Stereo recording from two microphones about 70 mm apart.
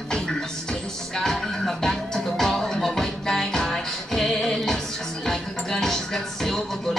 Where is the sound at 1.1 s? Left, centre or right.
Centre.